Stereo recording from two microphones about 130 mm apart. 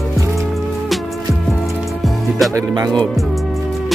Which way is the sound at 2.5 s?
30° right (ahead or behind).